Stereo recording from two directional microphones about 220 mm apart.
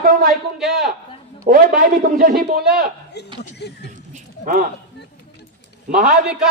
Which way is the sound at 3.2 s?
50° left (ahead or behind).